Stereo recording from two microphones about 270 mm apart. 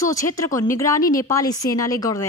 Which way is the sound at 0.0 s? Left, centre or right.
Centre.